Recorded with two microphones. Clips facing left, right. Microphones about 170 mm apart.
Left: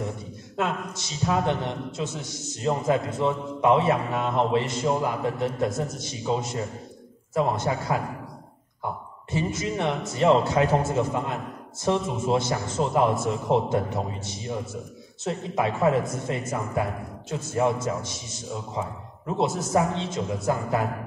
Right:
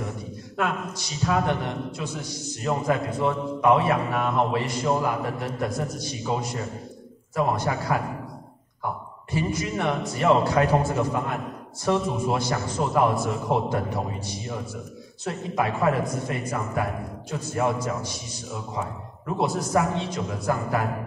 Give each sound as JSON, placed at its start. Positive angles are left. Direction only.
{"t": 0.6, "sound": "a man's voice", "side_deg": 25}
{"t": 9.3, "sound": "a man's voice", "side_deg": 25}